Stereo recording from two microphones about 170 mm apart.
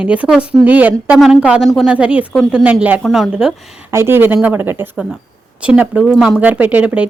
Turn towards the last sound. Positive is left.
turn(degrees=-5)  # may be behind; listen again after turning